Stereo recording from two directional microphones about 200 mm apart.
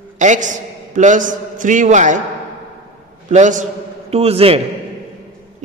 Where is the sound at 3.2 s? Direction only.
40° right (ahead or behind).